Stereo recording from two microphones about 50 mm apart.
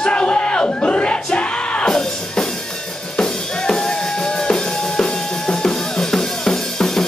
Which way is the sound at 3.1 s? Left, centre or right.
Centre.